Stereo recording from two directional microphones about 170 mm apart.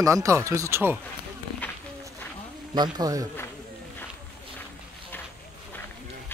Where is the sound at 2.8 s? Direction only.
20° right (ahead or behind).